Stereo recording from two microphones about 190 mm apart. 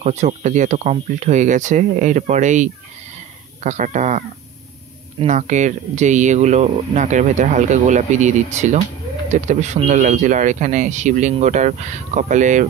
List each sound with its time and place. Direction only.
0.0 s speech: 35° right (ahead or behind)
5.2 s speech: 40° right (ahead or behind)